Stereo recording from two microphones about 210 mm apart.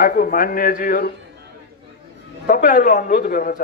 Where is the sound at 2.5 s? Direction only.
40° left (ahead or behind).